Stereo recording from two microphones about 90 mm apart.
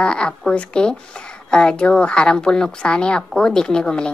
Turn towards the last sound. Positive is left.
turn(degrees=10)  # may be behind; listen again after turning